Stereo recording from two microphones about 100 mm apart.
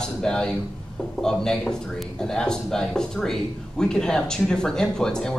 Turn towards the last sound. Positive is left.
turn(degrees=5)  # may be behind; listen again after turning